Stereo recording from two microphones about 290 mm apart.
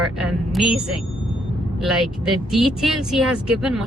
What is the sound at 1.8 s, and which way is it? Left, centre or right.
Speech, centre.